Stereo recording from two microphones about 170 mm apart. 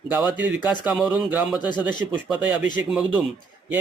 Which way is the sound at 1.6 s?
25° left (ahead or behind).